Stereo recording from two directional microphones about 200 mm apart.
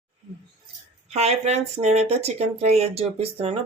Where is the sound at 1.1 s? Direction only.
30° right (ahead or behind).